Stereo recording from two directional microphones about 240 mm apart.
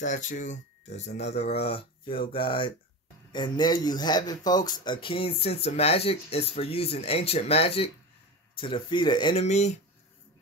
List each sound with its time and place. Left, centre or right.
0.0 s a man's voice: left